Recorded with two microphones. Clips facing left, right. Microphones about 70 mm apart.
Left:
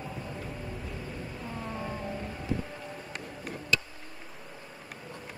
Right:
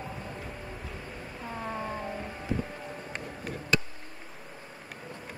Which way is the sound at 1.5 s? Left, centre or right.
Right.